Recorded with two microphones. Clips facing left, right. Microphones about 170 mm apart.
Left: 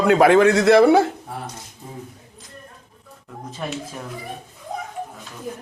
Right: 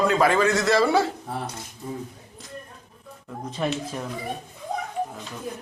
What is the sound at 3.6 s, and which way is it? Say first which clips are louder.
Speech: right 4 dB; centre (ahead or behind).